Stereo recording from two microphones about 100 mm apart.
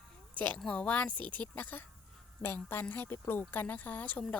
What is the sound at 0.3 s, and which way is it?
A woman's voice, 15° left (ahead or behind).